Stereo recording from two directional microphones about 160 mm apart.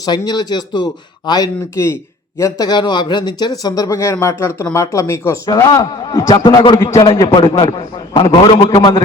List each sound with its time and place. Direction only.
0.0 s a man's voice: 25° left (ahead or behind)